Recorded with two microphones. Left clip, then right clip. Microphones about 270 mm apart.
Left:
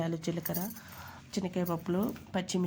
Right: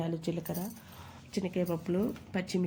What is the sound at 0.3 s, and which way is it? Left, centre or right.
Speech, centre.